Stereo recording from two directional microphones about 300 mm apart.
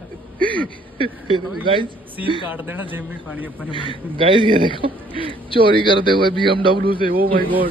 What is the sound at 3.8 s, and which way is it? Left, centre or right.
Speech, centre.